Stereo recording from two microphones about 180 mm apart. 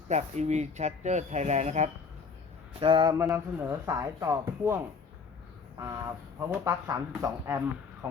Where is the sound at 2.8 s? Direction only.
25° right (ahead or behind).